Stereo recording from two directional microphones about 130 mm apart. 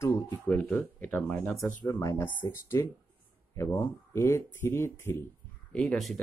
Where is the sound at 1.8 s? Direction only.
25° left (ahead or behind).